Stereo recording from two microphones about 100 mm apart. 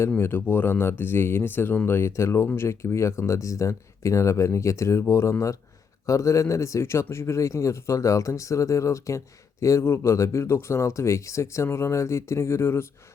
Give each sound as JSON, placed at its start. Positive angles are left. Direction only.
{"t": 0.2, "sound": "speech", "side_deg": 20}